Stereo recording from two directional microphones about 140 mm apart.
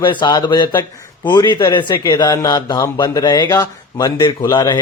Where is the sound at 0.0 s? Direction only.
35° left (ahead or behind).